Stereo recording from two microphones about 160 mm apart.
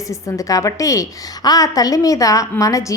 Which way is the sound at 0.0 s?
20° left (ahead or behind).